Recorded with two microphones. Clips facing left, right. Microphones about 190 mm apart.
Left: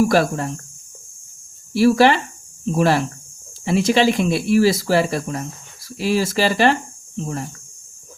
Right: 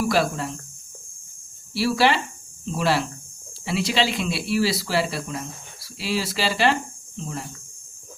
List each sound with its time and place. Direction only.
0.0 s speech: 50° left (ahead or behind)
1.7 s speech: 50° left (ahead or behind)